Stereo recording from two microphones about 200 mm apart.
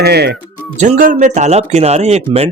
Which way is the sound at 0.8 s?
40° right (ahead or behind).